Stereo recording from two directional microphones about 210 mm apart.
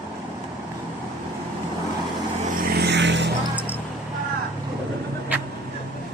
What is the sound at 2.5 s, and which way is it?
Vehicle, 45° right (ahead or behind).